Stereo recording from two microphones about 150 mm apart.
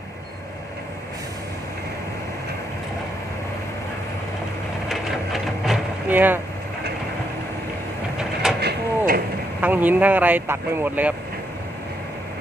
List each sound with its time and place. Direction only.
4.9 s printer: centre (ahead or behind)
6.1 s speech: 10° right (ahead or behind)
8.2 s train: 5° right (ahead or behind)
8.6 s mechanisms: 90° right
9.6 s speech: 10° right (ahead or behind)